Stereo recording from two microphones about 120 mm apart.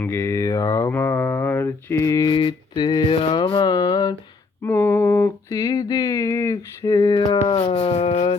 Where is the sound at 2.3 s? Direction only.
40° left (ahead or behind).